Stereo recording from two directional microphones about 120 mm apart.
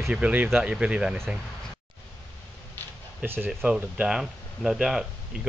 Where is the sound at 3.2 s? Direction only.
20° right (ahead or behind).